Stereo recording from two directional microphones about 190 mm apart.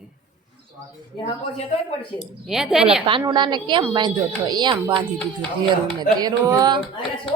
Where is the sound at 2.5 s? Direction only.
5° right (ahead or behind).